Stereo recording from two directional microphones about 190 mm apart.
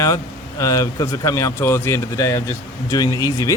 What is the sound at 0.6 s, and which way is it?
Speech, 15° left (ahead or behind).